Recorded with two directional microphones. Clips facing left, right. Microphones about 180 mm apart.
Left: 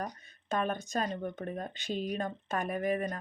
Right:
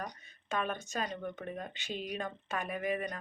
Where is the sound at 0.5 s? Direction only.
40° left (ahead or behind).